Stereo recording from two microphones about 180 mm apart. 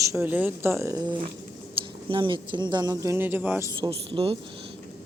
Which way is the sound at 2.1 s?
25° right (ahead or behind).